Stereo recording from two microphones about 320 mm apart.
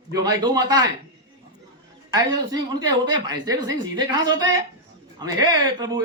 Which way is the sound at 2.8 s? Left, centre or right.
Centre.